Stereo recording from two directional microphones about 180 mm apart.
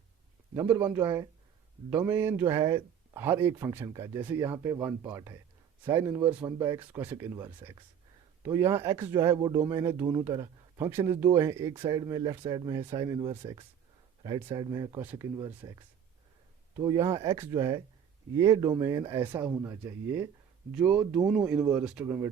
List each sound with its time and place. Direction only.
0.5 s speech: 10° right (ahead or behind)